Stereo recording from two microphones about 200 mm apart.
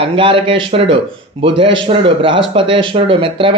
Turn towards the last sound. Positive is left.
turn(degrees=-25)  # may be behind; listen again after turning